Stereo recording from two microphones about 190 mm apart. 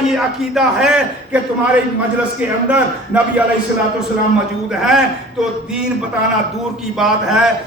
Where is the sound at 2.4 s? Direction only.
5° right (ahead or behind).